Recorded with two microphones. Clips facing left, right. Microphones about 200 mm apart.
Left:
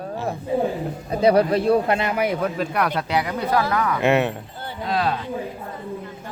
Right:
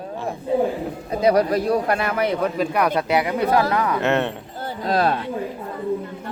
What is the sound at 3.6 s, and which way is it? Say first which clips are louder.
Speech: right 1 dB; 30° right (ahead or behind).